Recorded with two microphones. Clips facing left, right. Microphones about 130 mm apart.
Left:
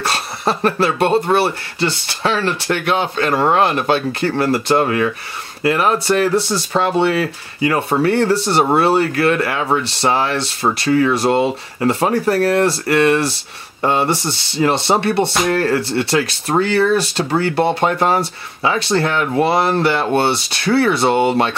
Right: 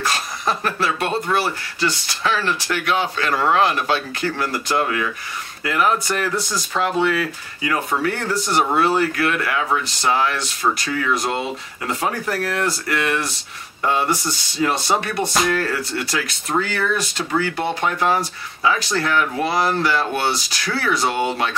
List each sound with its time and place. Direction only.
0.1 s speech: 30° left (ahead or behind)
3.3 s speech: 40° left (ahead or behind)
4.4 s speech: 30° left (ahead or behind)